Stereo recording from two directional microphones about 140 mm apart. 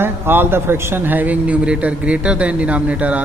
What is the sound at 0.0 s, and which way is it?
A man's voice, 15° right (ahead or behind).